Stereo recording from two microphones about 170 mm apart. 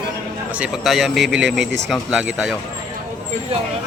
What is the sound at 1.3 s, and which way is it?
Speech, 90° right.